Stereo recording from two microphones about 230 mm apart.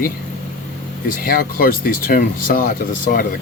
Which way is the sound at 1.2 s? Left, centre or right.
Left.